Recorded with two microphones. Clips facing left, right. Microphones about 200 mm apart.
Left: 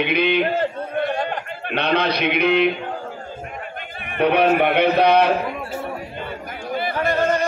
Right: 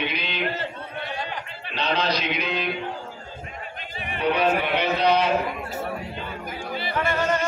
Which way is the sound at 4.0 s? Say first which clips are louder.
Left 5 dB; 60° left (ahead or behind).